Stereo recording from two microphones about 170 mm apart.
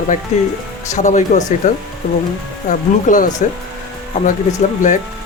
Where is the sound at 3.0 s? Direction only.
50° left (ahead or behind).